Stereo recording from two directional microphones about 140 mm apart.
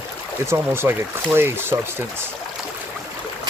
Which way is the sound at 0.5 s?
15° right (ahead or behind).